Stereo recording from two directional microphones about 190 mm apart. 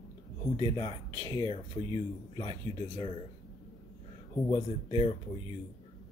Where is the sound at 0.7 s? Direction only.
20° left (ahead or behind).